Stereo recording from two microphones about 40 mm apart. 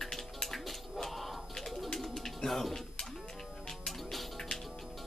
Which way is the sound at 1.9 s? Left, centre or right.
Centre.